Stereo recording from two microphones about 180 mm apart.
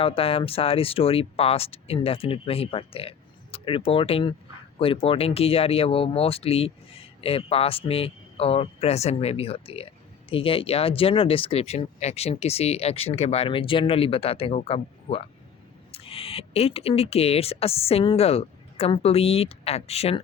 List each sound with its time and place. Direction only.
0.0 s speech: 30° left (ahead or behind)